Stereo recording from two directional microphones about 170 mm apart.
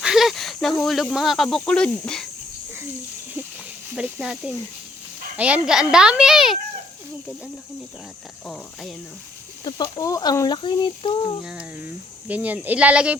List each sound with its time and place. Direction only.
0.0 s speech: centre (ahead or behind)
3.9 s speech: 5° right (ahead or behind)
8.4 s speech: centre (ahead or behind)
9.6 s speech: 25° left (ahead or behind)
11.4 s speech: 10° right (ahead or behind)